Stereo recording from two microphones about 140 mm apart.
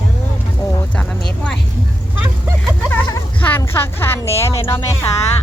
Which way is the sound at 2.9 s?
25° left (ahead or behind).